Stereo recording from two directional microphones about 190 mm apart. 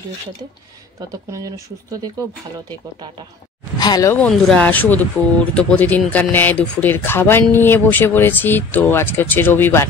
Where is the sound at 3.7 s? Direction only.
20° left (ahead or behind).